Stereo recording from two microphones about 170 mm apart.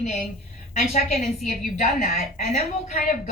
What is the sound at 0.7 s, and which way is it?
A woman's voice, 45° left (ahead or behind).